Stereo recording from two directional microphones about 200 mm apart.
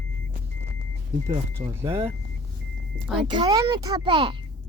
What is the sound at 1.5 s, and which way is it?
Speech, 10° right (ahead or behind).